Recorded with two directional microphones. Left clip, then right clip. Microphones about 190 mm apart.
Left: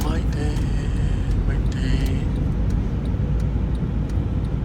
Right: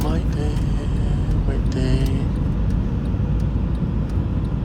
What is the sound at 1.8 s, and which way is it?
Music, 30° right (ahead or behind).